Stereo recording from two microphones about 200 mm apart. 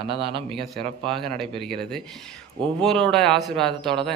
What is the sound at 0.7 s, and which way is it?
A man's voice, centre (ahead or behind).